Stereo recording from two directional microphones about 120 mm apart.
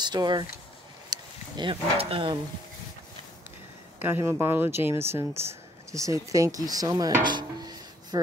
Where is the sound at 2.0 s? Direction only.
50° right (ahead or behind).